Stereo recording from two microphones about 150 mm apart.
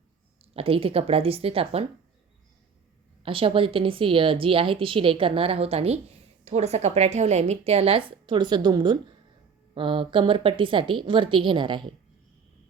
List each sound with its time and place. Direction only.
0.5 s a woman's voice: 40° right (ahead or behind)
3.2 s a woman's voice: 35° right (ahead or behind)